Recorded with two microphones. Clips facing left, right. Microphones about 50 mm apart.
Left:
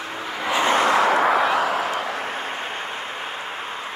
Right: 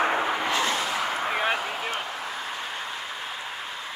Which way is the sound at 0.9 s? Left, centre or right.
Left.